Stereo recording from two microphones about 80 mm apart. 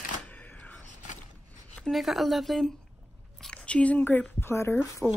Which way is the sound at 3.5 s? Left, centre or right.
Centre.